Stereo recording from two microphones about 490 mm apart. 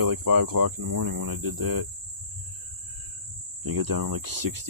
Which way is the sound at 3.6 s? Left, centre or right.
Right.